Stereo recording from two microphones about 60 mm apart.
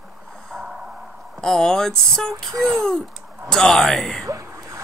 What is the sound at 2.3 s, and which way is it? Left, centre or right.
Speech, right.